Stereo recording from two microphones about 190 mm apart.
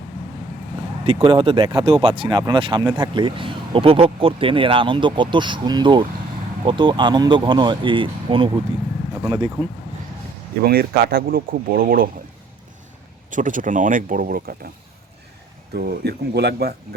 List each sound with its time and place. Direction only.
1.0 s speech: 25° right (ahead or behind)
10.7 s speech: 55° right (ahead or behind)
13.3 s speech: 45° right (ahead or behind)
15.7 s speech: 55° right (ahead or behind)